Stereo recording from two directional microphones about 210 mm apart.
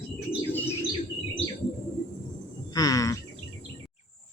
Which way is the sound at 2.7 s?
15° left (ahead or behind).